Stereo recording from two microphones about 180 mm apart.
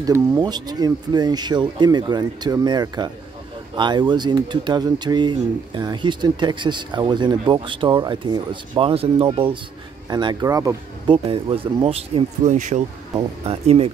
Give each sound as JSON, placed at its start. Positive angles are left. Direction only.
{"t": 0.0, "sound": "speech", "side_deg": -20}
{"t": 11.2, "sound": "speech", "side_deg": -30}